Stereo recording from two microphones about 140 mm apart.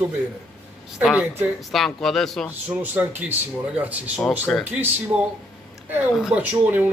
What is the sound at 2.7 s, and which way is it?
Speech, 10° right (ahead or behind).